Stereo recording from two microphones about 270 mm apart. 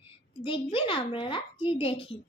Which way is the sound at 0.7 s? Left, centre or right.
Centre.